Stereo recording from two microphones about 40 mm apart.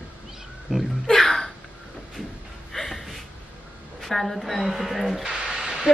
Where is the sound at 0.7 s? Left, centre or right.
Centre.